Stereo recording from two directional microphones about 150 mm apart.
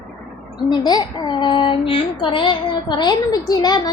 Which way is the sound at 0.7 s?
25° left (ahead or behind).